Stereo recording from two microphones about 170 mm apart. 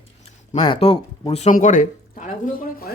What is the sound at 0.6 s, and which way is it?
Speech, 30° left (ahead or behind).